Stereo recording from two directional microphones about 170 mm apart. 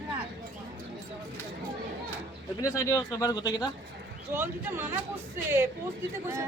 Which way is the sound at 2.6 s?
20° left (ahead or behind).